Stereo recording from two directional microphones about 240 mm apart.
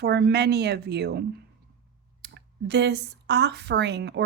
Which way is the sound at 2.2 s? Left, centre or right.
Right.